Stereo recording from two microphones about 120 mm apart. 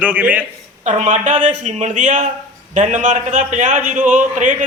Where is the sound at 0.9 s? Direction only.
90° right.